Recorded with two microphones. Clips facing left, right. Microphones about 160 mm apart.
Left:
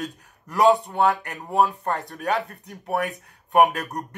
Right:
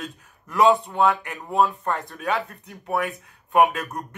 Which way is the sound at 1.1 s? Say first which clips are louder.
Even; 40° left (ahead or behind).